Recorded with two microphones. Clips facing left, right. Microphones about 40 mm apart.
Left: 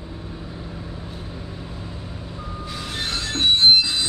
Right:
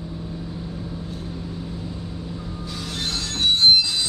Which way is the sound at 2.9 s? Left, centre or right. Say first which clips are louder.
Left 2 dB; left.